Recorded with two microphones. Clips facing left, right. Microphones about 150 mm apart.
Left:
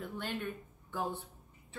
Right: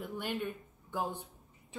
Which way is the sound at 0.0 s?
10° right (ahead or behind).